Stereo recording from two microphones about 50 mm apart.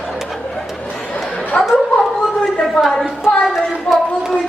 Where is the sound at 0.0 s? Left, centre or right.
Centre.